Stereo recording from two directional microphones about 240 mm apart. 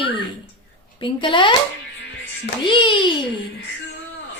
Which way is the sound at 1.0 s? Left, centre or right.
Left.